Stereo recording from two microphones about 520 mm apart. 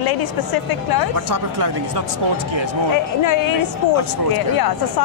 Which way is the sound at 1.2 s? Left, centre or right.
Right.